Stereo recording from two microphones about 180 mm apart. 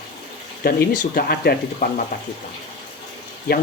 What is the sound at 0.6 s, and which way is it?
Speech, 55° left (ahead or behind).